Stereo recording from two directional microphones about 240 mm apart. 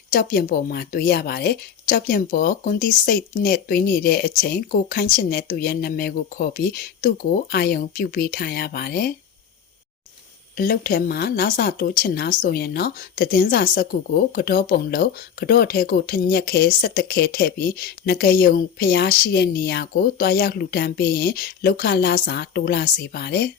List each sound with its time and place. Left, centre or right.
0.1 s speech: left
10.6 s speech: left